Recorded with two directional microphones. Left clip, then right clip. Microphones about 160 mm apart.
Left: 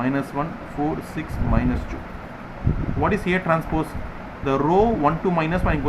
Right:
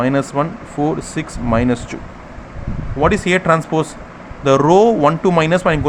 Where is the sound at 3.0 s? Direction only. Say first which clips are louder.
Right 8 dB; 65° right (ahead or behind).